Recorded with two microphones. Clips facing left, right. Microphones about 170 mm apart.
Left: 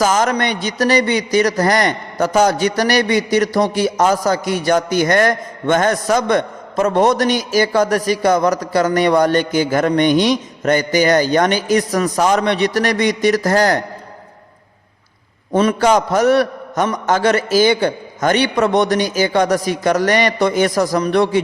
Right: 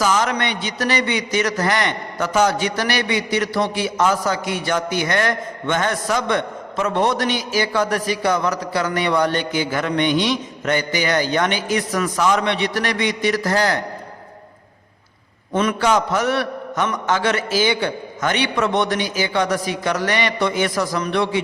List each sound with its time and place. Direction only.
0.0 s a man's voice: 45° left (ahead or behind)
15.5 s a man's voice: 40° left (ahead or behind)